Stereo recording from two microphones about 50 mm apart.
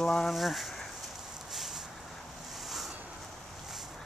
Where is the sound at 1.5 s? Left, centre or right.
Centre.